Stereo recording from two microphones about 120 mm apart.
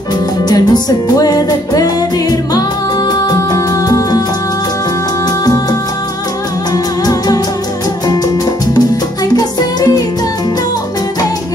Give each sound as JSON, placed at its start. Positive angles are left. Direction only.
{"t": 0.5, "sound": "music", "side_deg": 35}
{"t": 5.4, "sound": "music", "side_deg": 30}
{"t": 8.7, "sound": "music", "side_deg": 35}